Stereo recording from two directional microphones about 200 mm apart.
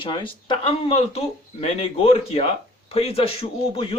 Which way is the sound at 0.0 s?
25° left (ahead or behind).